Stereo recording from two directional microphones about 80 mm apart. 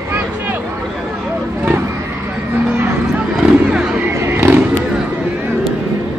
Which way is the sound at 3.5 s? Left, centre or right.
Centre.